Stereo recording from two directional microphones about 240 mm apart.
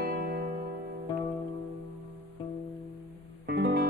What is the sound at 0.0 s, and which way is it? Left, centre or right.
Music, right.